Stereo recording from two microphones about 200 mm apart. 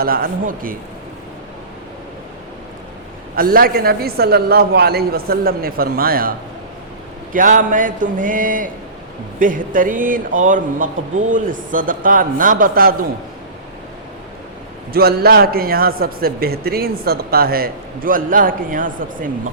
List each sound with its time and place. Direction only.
0.0 s a man's voice: 45° right (ahead or behind)
3.3 s a man's voice: 45° right (ahead or behind)
7.3 s a man's voice: 40° right (ahead or behind)
14.9 s a man's voice: 50° right (ahead or behind)